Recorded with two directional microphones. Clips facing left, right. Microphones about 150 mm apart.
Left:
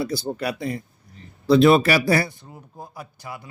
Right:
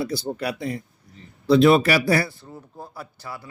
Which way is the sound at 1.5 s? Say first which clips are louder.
Left 1 dB; 35° left (ahead or behind).